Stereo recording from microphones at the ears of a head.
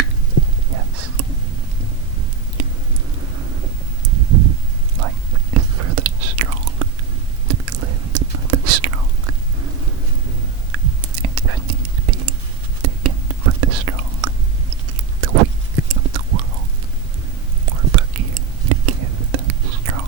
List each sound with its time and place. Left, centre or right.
0.7 s whispering: right
3.2 s vehicle: right
4.0 s a sound: right
4.9 s whispering: right
15.9 s chewing: right
17.7 s whispering: right